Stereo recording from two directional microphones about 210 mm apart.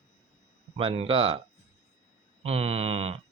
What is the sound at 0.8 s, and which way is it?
Speech, 25° right (ahead or behind).